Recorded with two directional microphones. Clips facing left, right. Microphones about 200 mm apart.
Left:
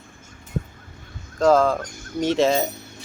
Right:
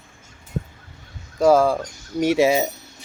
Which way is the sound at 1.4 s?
10° right (ahead or behind).